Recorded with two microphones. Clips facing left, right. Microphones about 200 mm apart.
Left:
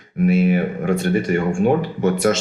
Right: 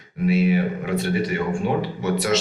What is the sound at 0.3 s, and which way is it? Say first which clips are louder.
Speech: left 2 dB; 50° left (ahead or behind).